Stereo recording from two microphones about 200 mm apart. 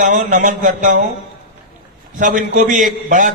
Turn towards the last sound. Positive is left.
turn(degrees=-40)  # may be behind; listen again after turning